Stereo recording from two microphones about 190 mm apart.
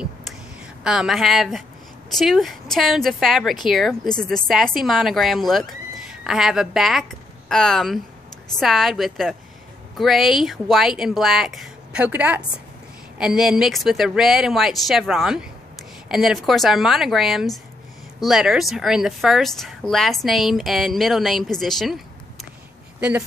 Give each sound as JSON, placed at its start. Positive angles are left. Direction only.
{"t": 0.8, "sound": "a woman's voice", "side_deg": 0}